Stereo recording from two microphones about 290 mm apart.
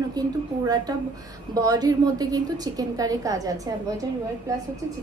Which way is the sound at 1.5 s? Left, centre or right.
Centre.